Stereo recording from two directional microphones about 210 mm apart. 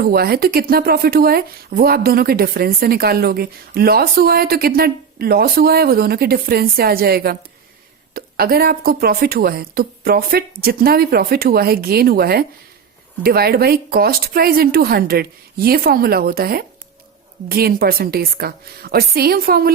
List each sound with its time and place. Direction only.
0.0 s speech: 45° right (ahead or behind)